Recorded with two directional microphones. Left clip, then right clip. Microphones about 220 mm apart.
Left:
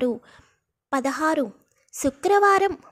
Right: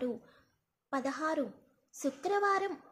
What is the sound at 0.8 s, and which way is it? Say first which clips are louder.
A woman's voice: left 11 dB; 40° left (ahead or behind).